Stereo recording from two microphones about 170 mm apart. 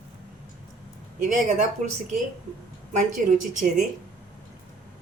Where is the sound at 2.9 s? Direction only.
45° right (ahead or behind).